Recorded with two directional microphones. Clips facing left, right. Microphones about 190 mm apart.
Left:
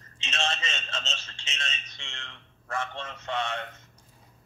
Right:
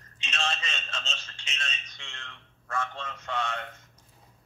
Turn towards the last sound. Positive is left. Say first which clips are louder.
# left 1 dB
turn(degrees=25)  # may be behind; listen again after turning